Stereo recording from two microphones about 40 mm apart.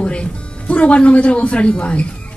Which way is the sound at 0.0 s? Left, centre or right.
Left.